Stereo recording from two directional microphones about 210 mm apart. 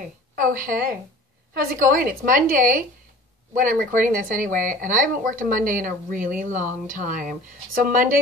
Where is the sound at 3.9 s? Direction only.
40° right (ahead or behind).